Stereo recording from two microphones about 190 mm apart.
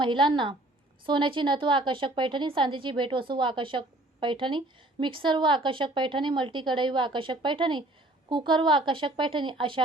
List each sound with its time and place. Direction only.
0.0 s a woman's voice: 25° right (ahead or behind)